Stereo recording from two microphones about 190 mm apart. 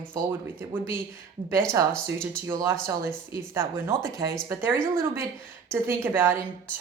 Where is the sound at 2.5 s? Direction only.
20° right (ahead or behind).